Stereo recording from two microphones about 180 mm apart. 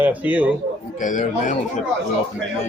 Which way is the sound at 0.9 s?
45° left (ahead or behind).